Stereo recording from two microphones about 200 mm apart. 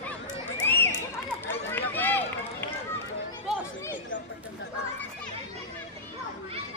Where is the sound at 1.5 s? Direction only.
10° left (ahead or behind).